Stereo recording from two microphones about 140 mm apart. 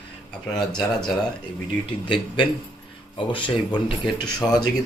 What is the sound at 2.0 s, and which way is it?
Speech, 35° left (ahead or behind).